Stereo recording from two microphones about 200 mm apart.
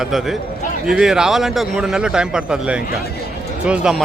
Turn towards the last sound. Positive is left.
turn(degrees=-5)  # may be behind; listen again after turning